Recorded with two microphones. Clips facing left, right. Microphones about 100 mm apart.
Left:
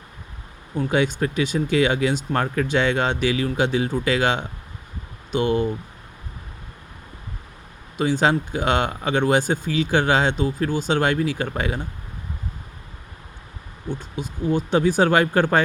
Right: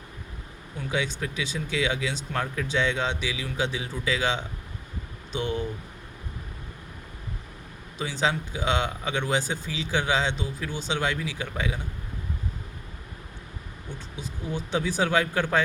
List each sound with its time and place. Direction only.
0.8 s speech: 55° left (ahead or behind)
7.9 s speech: 55° left (ahead or behind)
14.2 s speech: 55° left (ahead or behind)